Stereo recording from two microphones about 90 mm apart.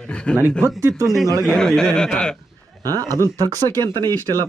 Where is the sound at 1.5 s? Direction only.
5° left (ahead or behind).